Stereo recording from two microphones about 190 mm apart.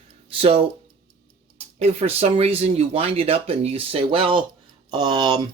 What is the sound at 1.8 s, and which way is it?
Speech, 30° right (ahead or behind).